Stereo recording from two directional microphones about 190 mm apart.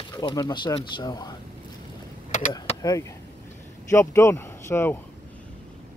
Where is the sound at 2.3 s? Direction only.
40° left (ahead or behind).